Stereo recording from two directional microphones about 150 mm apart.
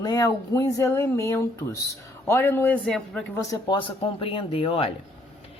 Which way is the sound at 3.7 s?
35° left (ahead or behind).